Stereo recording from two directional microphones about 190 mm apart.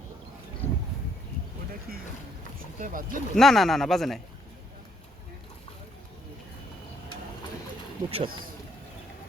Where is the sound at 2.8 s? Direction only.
45° right (ahead or behind).